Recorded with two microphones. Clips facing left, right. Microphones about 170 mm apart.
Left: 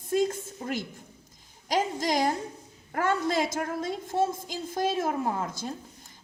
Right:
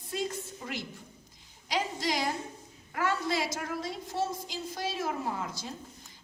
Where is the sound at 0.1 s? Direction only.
45° left (ahead or behind).